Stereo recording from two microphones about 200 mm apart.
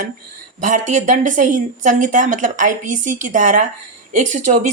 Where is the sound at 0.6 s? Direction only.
40° right (ahead or behind).